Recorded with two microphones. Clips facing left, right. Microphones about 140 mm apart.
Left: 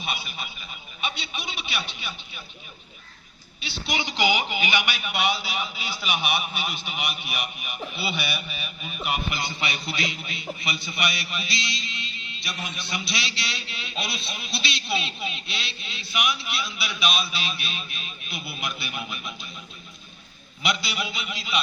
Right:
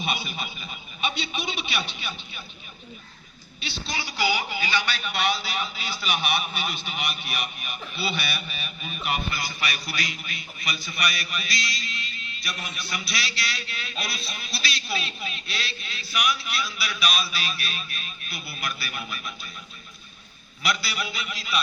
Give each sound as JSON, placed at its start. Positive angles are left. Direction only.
{"t": 0.0, "sound": "a man's voice", "side_deg": 5}
{"t": 3.6, "sound": "a man's voice", "side_deg": 15}
{"t": 9.3, "sound": "a man's voice", "side_deg": 25}
{"t": 20.6, "sound": "a man's voice", "side_deg": 20}